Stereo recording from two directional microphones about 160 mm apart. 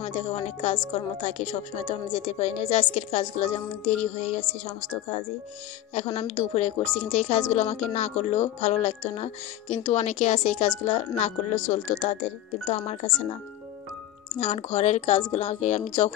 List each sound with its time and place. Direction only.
0.0 s a woman's voice: 45° left (ahead or behind)
5.9 s a woman's voice: 45° left (ahead or behind)
14.4 s a woman's voice: 45° left (ahead or behind)